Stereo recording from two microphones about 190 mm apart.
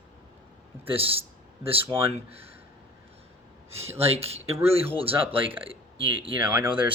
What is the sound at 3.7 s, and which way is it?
Speech, 30° right (ahead or behind).